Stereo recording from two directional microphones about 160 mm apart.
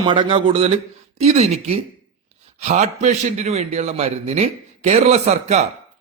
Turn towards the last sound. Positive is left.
turn(degrees=-45)  # may be behind; listen again after turning